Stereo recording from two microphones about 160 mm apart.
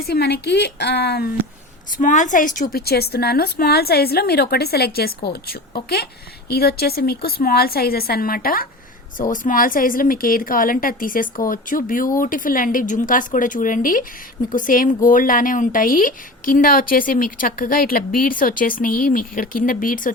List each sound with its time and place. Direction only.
0.0 s a woman's voice: 75° left (ahead or behind)
1.9 s a woman's voice: 55° left (ahead or behind)
2.8 s a woman's voice: 80° left; by 20.1 s 60° left (ahead or behind)